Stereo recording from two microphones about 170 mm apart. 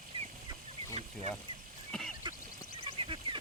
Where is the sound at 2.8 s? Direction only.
30° right (ahead or behind).